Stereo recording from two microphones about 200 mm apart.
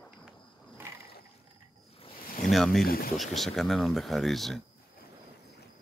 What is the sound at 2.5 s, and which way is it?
Speech, centre (ahead or behind).